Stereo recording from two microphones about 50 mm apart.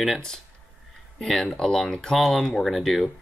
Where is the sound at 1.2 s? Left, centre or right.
Centre.